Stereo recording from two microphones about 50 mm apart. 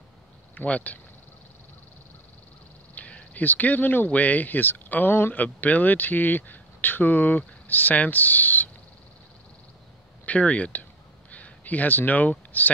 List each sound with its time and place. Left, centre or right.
0.6 s speech: left
2.9 s speech: left
10.2 s a sound: left